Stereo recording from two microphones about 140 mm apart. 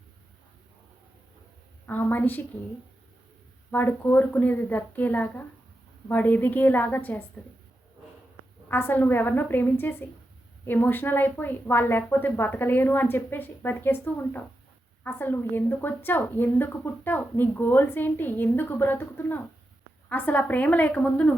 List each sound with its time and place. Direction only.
1.9 s a woman's voice: 15° left (ahead or behind)
3.7 s a woman's voice: 15° left (ahead or behind)
8.7 s a woman's voice: 15° left (ahead or behind)